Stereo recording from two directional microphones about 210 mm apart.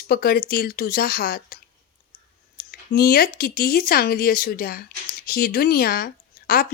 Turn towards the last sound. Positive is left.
turn(degrees=45)  # may be behind; listen again after turning